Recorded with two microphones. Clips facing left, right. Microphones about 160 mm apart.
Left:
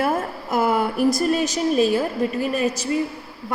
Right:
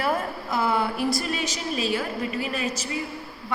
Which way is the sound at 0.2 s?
45° left (ahead or behind).